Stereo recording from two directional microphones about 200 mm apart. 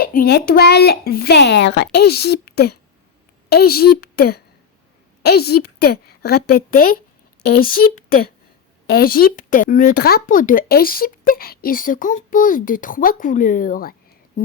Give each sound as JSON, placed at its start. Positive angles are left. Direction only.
{"t": 0.0, "sound": "speech", "side_deg": 45}